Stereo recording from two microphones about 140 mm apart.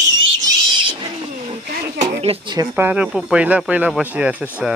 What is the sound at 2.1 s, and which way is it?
Speech, 45° right (ahead or behind).